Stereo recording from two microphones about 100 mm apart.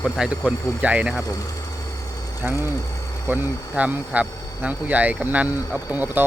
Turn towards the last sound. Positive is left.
turn(degrees=-20)  # may be behind; listen again after turning